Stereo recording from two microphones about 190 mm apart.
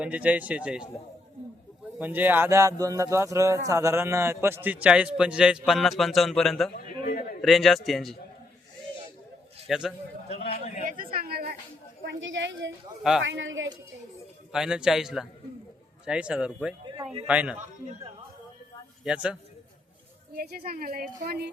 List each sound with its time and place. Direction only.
0.0 s speech: 5° right (ahead or behind)
2.0 s speech: 10° right (ahead or behind)
6.7 s a sound: 50° left (ahead or behind)
7.4 s a man's voice: centre (ahead or behind)
9.6 s a man's voice: 5° right (ahead or behind)
10.3 s a man's voice: 35° left (ahead or behind)
10.8 s chatter: 50° right (ahead or behind)
12.0 s speech: 75° right (ahead or behind)
13.0 s a man's voice: centre (ahead or behind)
13.2 s speech: 90° right
14.5 s a man's voice: 5° right (ahead or behind)
17.6 s a man's voice: 40° right (ahead or behind)
19.0 s a man's voice: 5° right (ahead or behind)
20.3 s speech: 55° right (ahead or behind)